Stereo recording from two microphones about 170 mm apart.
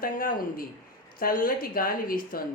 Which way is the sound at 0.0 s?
55° left (ahead or behind).